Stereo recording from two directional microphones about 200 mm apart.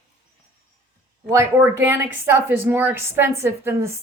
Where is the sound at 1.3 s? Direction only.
10° right (ahead or behind).